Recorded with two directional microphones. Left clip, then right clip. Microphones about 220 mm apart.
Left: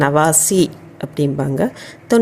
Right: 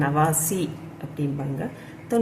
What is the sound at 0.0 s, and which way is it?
Speech, 45° left (ahead or behind).